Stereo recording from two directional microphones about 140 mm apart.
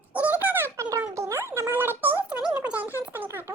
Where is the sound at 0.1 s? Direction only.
10° right (ahead or behind).